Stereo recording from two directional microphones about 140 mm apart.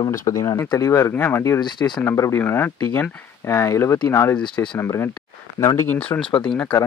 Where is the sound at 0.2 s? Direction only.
20° left (ahead or behind); by 6.7 s 5° left (ahead or behind).